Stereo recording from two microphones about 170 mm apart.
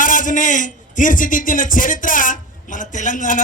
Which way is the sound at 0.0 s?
50° left (ahead or behind).